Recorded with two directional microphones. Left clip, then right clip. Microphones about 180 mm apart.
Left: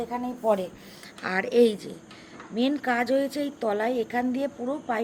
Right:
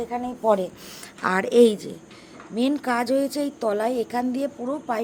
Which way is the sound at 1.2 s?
40° right (ahead or behind).